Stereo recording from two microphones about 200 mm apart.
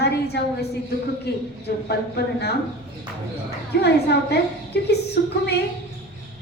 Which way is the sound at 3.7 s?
55° left (ahead or behind).